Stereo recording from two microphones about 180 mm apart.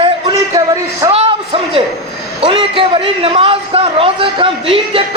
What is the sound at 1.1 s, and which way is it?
A man's voice, 30° right (ahead or behind).